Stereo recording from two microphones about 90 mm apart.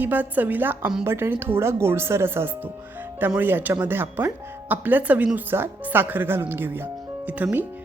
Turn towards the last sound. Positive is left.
turn(degrees=-20)  # may be behind; listen again after turning